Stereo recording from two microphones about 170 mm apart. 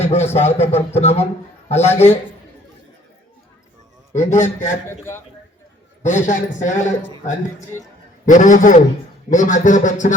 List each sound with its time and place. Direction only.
0.0 s a sound: 40° left (ahead or behind)
0.3 s a man's voice: 40° left (ahead or behind)
4.1 s a man's voice: 45° left (ahead or behind)
4.9 s a man's voice: 15° left (ahead or behind)
6.0 s a man's voice: 45° left (ahead or behind)
7.7 s a man's voice: 15° left (ahead or behind)
8.3 s a man's voice: 50° left (ahead or behind)